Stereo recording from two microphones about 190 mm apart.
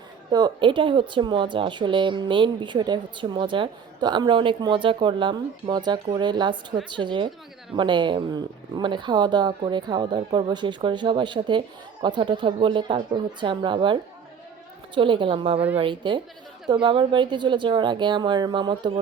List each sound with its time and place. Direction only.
0.3 s speech: 20° right (ahead or behind)